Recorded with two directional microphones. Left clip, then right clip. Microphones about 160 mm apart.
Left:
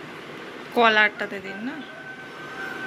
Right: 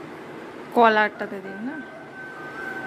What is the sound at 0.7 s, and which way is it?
Speech, 30° right (ahead or behind).